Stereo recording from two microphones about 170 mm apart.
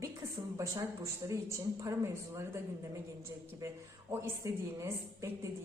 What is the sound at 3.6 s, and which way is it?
A woman's voice, 20° right (ahead or behind).